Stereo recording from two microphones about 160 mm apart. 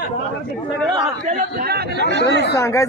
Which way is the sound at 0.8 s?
45° right (ahead or behind).